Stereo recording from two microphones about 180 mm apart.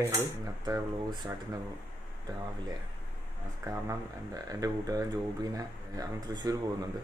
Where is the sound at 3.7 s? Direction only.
20° right (ahead or behind).